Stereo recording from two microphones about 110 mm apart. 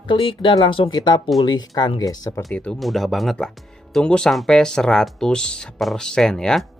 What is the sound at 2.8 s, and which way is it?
Speech, centre (ahead or behind).